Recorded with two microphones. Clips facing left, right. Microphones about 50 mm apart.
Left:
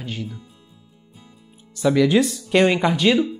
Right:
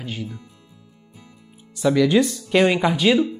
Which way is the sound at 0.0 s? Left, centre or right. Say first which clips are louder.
Even; centre.